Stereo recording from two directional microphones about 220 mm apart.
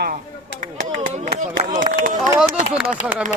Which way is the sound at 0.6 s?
35° right (ahead or behind).